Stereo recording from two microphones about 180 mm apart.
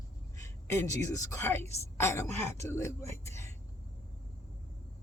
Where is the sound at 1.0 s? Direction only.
15° left (ahead or behind).